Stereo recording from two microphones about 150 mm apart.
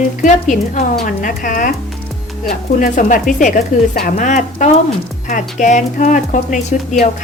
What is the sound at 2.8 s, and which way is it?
Speech, 60° left (ahead or behind).